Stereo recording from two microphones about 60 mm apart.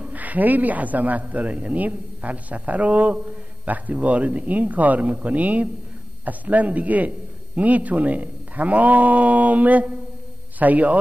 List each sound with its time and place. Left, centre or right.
0.0 s a man's voice: right